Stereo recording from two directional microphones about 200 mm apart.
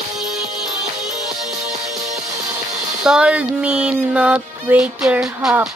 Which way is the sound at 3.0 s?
5° right (ahead or behind).